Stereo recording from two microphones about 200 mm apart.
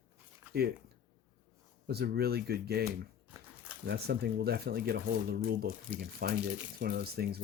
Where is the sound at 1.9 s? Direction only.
55° right (ahead or behind).